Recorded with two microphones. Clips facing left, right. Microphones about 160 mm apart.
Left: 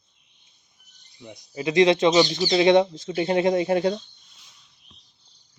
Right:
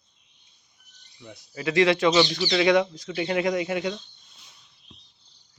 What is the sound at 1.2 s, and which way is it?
Speech, 15° left (ahead or behind).